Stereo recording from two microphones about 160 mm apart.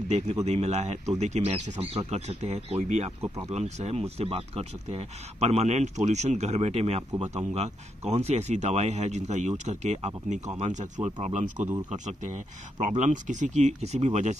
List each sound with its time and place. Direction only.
0.1 s speech: 40° right (ahead or behind)
11.5 s speech: 15° right (ahead or behind)
12.8 s speech: 50° right (ahead or behind)